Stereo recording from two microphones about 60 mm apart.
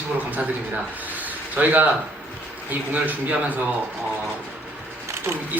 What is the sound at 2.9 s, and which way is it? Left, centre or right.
Speech, right.